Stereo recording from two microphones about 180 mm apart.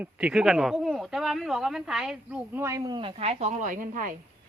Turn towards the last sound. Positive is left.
turn(degrees=-45)  # may be behind; listen again after turning